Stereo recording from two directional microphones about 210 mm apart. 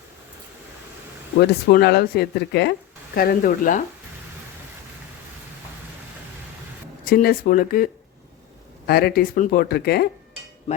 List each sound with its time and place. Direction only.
1.4 s speech: 50° left (ahead or behind)
7.0 s speech: 45° left (ahead or behind)
8.9 s speech: 45° left (ahead or behind)